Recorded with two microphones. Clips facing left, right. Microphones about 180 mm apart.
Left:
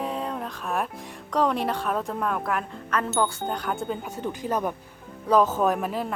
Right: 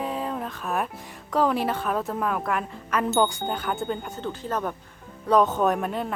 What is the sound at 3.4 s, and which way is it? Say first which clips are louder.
Speech: right 1 dB; centre (ahead or behind).